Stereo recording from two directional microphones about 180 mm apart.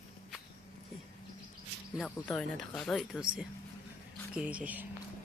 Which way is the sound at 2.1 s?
5° left (ahead or behind).